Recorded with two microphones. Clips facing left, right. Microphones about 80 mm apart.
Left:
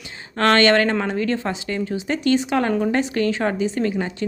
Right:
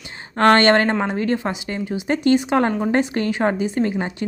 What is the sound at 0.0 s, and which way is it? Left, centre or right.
A woman's voice, right.